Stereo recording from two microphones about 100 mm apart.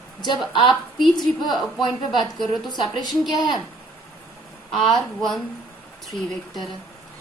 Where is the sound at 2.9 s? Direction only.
45° left (ahead or behind).